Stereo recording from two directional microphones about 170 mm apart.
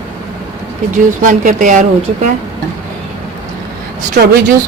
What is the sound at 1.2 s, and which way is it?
Speech, 50° right (ahead or behind).